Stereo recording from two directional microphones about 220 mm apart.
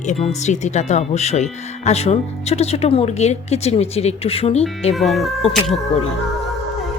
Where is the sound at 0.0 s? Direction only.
30° left (ahead or behind).